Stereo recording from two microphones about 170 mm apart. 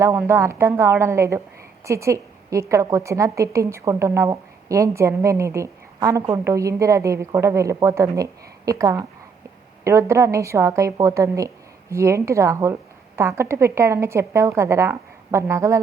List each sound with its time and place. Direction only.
0.0 s a woman's voice: 15° right (ahead or behind)